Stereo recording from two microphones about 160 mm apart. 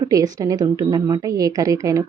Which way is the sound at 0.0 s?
20° right (ahead or behind).